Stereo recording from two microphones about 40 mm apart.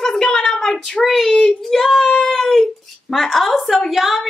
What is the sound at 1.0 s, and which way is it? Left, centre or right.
Speech, centre.